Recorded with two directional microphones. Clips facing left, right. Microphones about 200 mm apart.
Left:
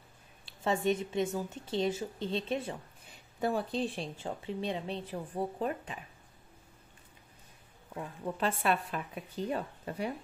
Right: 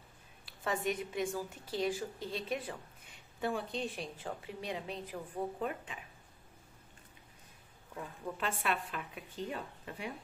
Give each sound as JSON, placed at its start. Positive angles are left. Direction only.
{"t": 0.5, "sound": "a woman's voice", "side_deg": 25}
{"t": 3.3, "sound": "a woman's voice", "side_deg": 40}
{"t": 7.9, "sound": "a woman's voice", "side_deg": 35}